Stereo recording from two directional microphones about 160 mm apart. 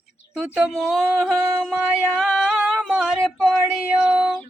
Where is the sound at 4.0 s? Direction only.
10° right (ahead or behind).